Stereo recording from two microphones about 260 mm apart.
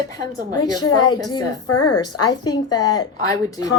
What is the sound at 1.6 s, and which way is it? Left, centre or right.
Speech, left.